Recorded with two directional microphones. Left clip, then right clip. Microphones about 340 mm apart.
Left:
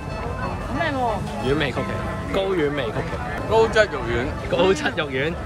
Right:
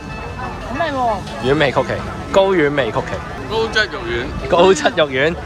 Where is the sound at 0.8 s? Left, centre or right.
Centre.